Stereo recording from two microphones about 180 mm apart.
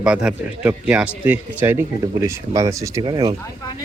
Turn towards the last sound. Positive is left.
turn(degrees=-20)  # may be behind; listen again after turning